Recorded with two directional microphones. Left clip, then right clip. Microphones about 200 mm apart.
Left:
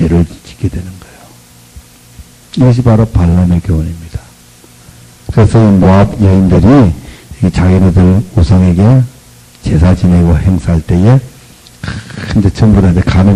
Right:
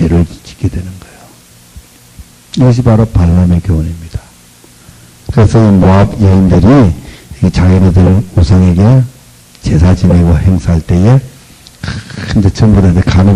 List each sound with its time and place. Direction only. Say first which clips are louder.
0.0 s a sound: even; 35° left (ahead or behind)
2.5 s a man's voice: even; 35° left (ahead or behind)
5.2 s a man's voice: even; 35° left (ahead or behind)